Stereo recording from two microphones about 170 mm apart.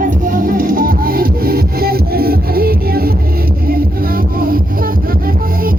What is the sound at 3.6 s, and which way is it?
Vehicle, 60° right (ahead or behind).